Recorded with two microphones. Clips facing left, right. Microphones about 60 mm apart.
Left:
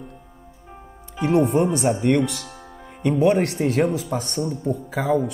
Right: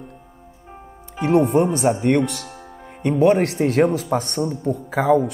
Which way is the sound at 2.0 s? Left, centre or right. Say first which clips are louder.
Right 1 dB; right.